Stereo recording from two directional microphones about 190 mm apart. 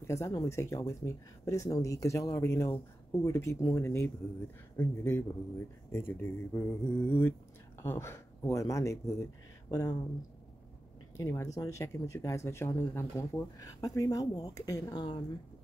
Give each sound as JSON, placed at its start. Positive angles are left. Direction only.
{"t": 0.0, "sound": "speech", "side_deg": 15}
{"t": 11.1, "sound": "speech", "side_deg": 15}